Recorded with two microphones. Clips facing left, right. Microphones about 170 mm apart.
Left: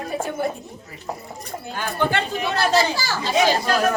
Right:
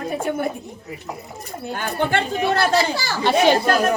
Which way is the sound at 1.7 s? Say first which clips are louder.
Right 1 dB; 55° right (ahead or behind).